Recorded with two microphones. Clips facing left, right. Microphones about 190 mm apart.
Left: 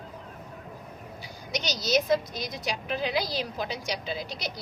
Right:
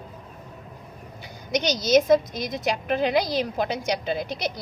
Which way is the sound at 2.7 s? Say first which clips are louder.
Right 7 dB; 55° right (ahead or behind).